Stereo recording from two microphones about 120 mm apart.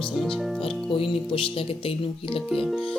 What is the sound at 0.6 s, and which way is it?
Speech, 45° left (ahead or behind).